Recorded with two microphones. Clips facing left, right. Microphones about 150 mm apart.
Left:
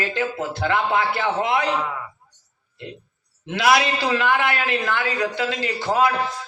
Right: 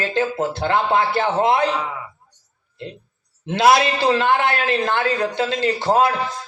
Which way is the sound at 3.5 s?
30° right (ahead or behind).